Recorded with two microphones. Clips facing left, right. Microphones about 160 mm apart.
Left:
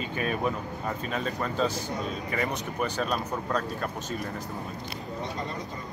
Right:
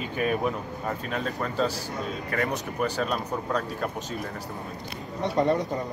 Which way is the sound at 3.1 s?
5° right (ahead or behind).